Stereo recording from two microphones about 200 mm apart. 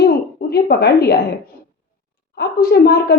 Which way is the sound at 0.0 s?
50° left (ahead or behind).